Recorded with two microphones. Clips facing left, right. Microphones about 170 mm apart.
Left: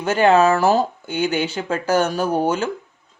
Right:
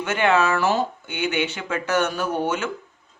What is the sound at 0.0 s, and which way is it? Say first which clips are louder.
Speech: left 5 dB; 35° left (ahead or behind).